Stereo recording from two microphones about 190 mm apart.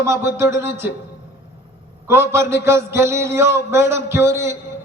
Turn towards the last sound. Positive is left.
turn(degrees=-15)  # may be behind; listen again after turning